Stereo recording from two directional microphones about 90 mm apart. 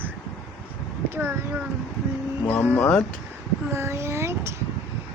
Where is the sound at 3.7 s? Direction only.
30° right (ahead or behind).